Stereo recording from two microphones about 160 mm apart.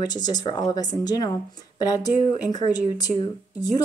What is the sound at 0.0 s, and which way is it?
Speech, 25° left (ahead or behind).